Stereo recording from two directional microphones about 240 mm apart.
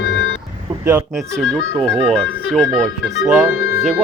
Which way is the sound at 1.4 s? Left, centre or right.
Centre.